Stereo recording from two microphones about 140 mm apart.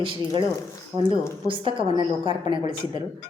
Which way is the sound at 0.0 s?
40° right (ahead or behind).